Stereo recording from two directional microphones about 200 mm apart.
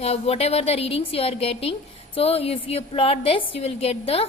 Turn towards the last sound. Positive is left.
turn(degrees=30)  # may be behind; listen again after turning